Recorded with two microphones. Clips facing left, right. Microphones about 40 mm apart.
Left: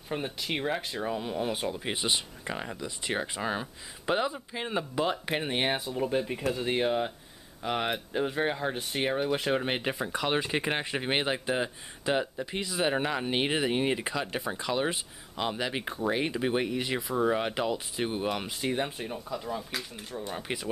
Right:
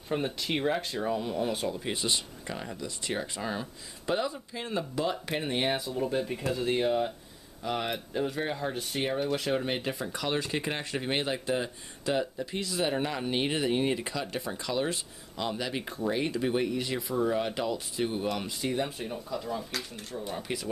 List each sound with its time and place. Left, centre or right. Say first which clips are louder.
0.1 s speech: right 2 dB; centre
20.4 s speech: even; left